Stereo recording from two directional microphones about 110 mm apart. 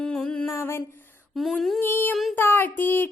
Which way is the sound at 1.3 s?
Centre (ahead or behind).